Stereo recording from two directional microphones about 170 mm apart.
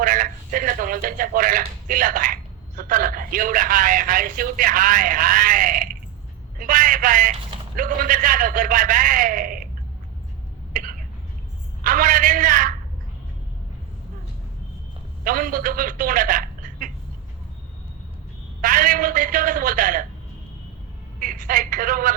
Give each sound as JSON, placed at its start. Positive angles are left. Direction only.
{"t": 0.0, "sound": "a man's voice", "side_deg": -50}
{"t": 10.7, "sound": "a sound", "side_deg": -50}
{"t": 11.8, "sound": "a man's voice", "side_deg": -55}
{"t": 15.2, "sound": "a man's voice", "side_deg": -55}
{"t": 18.6, "sound": "a man's voice", "side_deg": -50}
{"t": 21.2, "sound": "a man's voice", "side_deg": -50}